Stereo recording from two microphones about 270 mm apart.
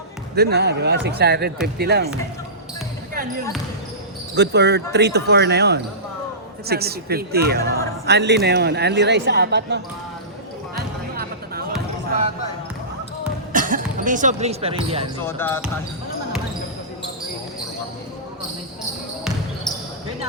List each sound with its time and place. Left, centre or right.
0.3 s speech: right
4.4 s speech: right
10.8 s music: right
13.5 s speech: right
15.2 s speech: centre